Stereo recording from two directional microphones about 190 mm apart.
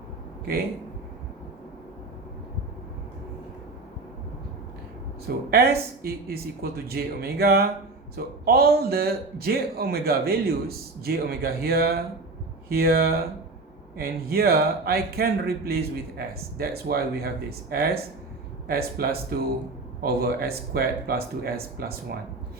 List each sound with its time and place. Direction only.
5.5 s a man's voice: 55° right (ahead or behind)